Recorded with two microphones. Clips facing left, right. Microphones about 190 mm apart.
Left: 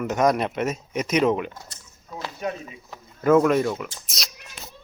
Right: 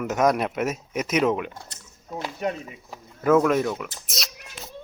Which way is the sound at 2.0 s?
20° right (ahead or behind).